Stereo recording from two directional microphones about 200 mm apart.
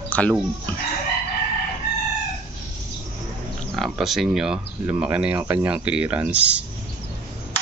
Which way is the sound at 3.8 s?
Centre (ahead or behind).